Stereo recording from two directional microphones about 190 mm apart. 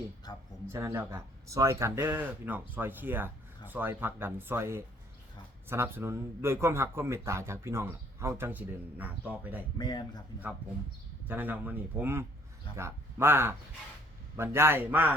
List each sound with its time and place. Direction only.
0.7 s speech: 15° right (ahead or behind)
9.7 s a man's voice: 20° left (ahead or behind)
11.3 s speech: 10° right (ahead or behind)